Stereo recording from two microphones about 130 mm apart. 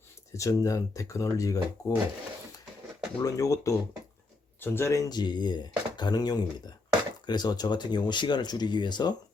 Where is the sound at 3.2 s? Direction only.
25° left (ahead or behind).